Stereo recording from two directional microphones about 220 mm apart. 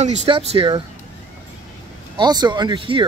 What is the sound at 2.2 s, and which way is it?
Speech, 20° right (ahead or behind).